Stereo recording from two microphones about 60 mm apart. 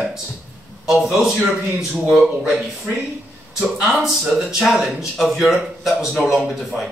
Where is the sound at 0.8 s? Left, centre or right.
Centre.